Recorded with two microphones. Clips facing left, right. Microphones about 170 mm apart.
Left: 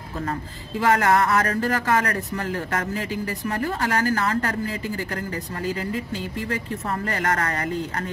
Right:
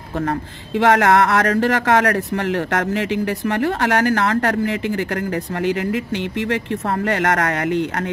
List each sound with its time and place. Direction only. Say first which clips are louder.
0.2 s speech: right 6 dB; 70° right (ahead or behind)